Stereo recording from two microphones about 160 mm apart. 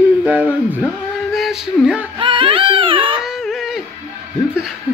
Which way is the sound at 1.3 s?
Centre (ahead or behind).